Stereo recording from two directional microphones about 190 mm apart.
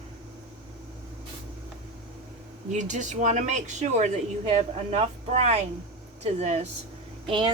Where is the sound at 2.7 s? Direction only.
40° right (ahead or behind).